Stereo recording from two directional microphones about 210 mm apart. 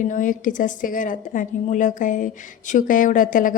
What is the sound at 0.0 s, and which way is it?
A woman's voice, 40° left (ahead or behind).